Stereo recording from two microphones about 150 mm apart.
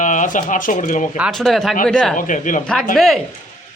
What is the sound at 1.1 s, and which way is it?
A man's voice, 5° right (ahead or behind).